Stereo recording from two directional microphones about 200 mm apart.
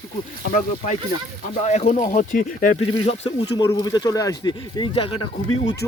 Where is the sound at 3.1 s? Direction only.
30° left (ahead or behind).